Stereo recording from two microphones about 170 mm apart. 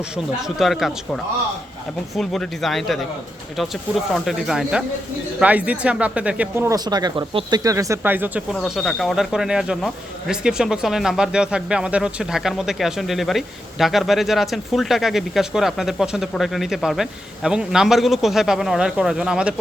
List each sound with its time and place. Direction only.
0.4 s speech: centre (ahead or behind)
6.7 s speech: 25° right (ahead or behind); by 19.5 s 5° right (ahead or behind)